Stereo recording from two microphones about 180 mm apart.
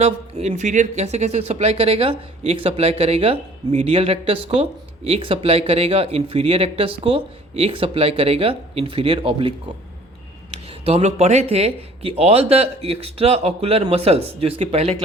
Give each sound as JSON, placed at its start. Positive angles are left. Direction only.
{"t": 0.0, "sound": "speech", "side_deg": -35}
{"t": 10.7, "sound": "speech", "side_deg": -35}